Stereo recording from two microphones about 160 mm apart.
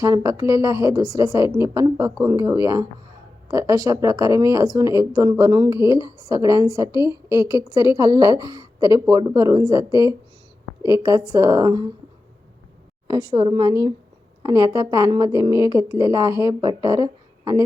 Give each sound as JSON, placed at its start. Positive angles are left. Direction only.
{"t": 0.0, "sound": "a woman's voice", "side_deg": -20}
{"t": 13.1, "sound": "a woman's voice", "side_deg": -25}